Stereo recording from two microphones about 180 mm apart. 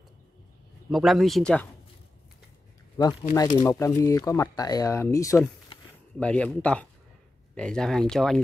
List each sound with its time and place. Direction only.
0.8 s speech: centre (ahead or behind)
3.0 s speech: 20° left (ahead or behind)
6.1 s speech: 5° left (ahead or behind)